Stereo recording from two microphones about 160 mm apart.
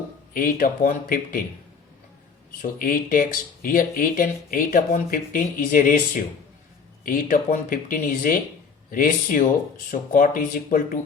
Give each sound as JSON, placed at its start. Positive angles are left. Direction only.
{"t": 0.3, "sound": "speech", "side_deg": 60}
{"t": 2.6, "sound": "speech", "side_deg": 60}